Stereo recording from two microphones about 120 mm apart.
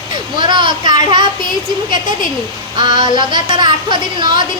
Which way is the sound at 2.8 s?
40° right (ahead or behind).